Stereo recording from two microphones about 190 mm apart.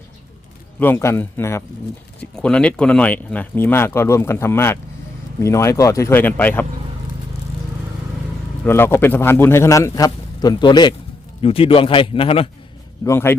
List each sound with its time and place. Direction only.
0.8 s speech: 10° left (ahead or behind)
8.6 s speech: 10° left (ahead or behind); by 12.5 s 30° left (ahead or behind)
13.1 s speech: 10° left (ahead or behind)